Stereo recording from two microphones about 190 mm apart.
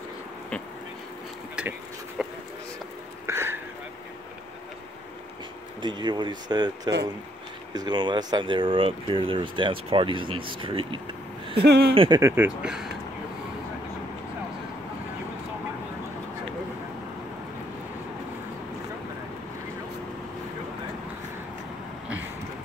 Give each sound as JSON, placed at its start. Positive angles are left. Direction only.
{"t": 1.6, "sound": "a sound", "side_deg": -5}
{"t": 3.3, "sound": "a sound", "side_deg": -15}
{"t": 5.8, "sound": "speech", "side_deg": -25}
{"t": 11.5, "sound": "speech", "side_deg": -60}
{"t": 11.9, "sound": "speech", "side_deg": -30}
{"t": 12.2, "sound": "speech", "side_deg": -15}